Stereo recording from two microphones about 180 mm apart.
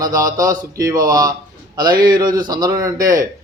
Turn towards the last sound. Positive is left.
turn(degrees=-20)  # may be behind; listen again after turning